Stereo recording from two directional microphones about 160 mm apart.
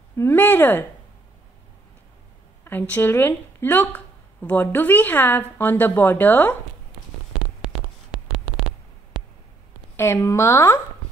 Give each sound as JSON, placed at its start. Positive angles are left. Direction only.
{"t": 0.2, "sound": "speech", "side_deg": 10}
{"t": 2.6, "sound": "speech", "side_deg": 15}
{"t": 9.9, "sound": "speech", "side_deg": 15}